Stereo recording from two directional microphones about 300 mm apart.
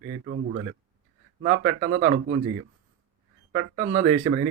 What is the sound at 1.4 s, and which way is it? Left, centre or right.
Speech, right.